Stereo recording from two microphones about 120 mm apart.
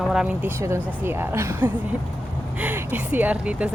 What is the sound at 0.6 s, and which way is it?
A woman's voice, 25° right (ahead or behind).